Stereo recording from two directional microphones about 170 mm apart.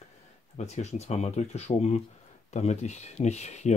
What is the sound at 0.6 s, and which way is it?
Speech, 40° left (ahead or behind).